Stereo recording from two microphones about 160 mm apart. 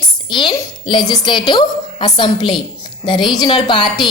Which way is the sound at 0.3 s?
30° left (ahead or behind).